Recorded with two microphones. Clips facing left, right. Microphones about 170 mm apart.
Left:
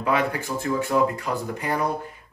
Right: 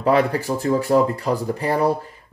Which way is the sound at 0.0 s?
35° right (ahead or behind).